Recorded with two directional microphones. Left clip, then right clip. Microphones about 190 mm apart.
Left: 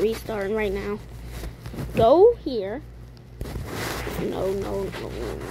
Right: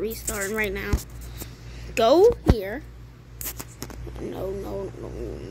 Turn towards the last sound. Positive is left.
turn(degrees=20)  # may be behind; listen again after turning